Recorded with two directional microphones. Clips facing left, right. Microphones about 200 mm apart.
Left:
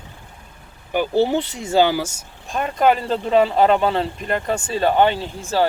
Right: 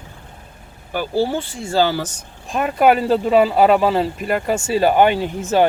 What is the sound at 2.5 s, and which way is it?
Speech, 5° right (ahead or behind).